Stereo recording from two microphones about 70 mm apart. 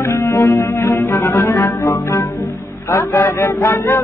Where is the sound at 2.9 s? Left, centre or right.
Left.